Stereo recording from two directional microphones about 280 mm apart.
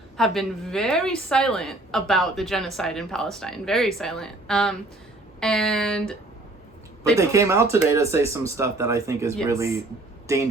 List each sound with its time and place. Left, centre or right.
0.2 s a woman's voice: centre
7.2 s speech: centre